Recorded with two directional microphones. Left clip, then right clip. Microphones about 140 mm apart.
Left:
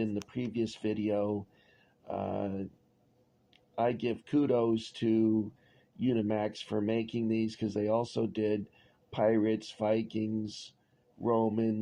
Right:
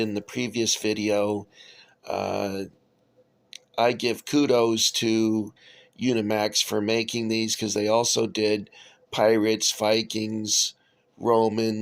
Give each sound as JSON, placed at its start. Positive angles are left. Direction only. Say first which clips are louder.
{"t": 0.0, "sound": "speech", "louder": "right 8 dB", "side_deg": -55}
{"t": 3.8, "sound": "speech", "louder": "right 8 dB", "side_deg": -50}